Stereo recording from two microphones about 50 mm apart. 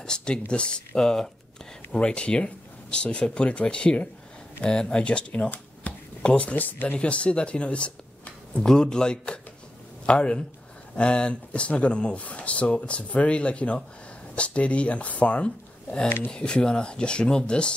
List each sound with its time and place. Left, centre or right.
0.0 s speech: centre; by 7.0 s left
7.0 s speech: left